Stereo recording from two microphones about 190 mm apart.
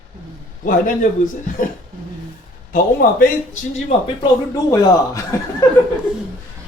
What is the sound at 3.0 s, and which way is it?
Speech, 45° left (ahead or behind).